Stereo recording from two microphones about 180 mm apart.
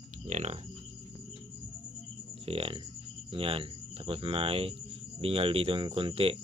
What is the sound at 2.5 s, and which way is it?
Speech, 30° right (ahead or behind).